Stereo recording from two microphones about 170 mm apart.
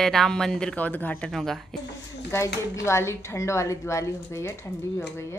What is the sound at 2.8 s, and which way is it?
A woman's voice, 15° left (ahead or behind).